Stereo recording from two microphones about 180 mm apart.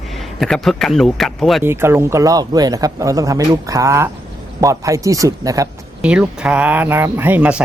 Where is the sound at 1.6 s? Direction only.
15° right (ahead or behind).